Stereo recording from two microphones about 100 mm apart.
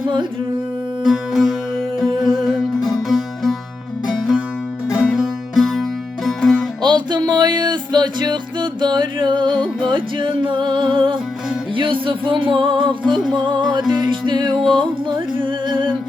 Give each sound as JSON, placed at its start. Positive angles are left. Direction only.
{"t": 1.0, "sound": "music", "side_deg": 0}
{"t": 6.8, "sound": "music", "side_deg": -50}